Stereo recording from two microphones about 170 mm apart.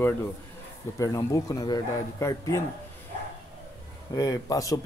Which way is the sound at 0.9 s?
20° left (ahead or behind).